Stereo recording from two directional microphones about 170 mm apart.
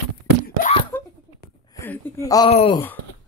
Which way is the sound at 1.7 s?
15° left (ahead or behind).